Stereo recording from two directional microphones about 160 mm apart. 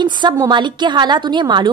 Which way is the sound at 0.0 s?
30° right (ahead or behind).